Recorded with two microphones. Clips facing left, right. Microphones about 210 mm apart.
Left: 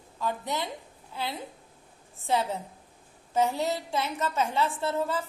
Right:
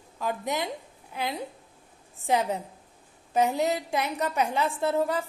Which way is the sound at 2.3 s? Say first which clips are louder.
Right 2 dB; 15° right (ahead or behind).